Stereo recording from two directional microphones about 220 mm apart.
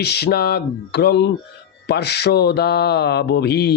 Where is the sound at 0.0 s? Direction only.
45° left (ahead or behind).